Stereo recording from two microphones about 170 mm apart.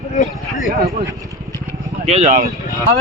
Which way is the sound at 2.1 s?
40° right (ahead or behind).